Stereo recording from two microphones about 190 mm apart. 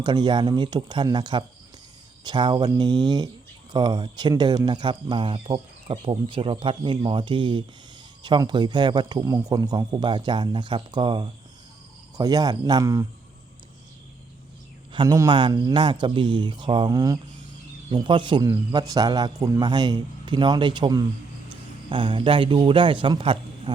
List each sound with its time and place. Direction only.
0.0 s speech: 20° right (ahead or behind)
14.9 s a man's voice: 15° right (ahead or behind)